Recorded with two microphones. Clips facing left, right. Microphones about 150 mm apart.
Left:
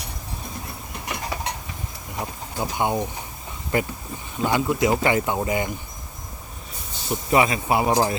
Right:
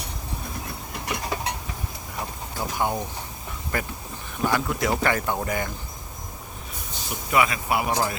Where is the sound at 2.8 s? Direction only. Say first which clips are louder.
Left 3 dB; 20° left (ahead or behind).